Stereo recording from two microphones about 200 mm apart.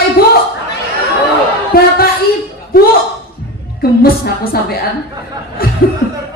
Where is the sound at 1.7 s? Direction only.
50° left (ahead or behind).